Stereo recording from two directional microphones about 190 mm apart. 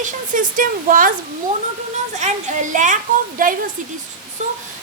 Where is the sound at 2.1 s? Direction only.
40° right (ahead or behind).